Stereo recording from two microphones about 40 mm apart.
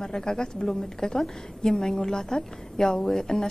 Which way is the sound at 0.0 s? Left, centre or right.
Centre.